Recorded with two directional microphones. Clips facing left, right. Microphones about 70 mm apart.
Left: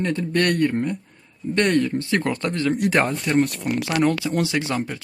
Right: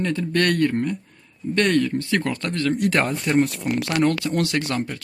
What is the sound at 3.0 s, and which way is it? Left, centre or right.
Speech, centre.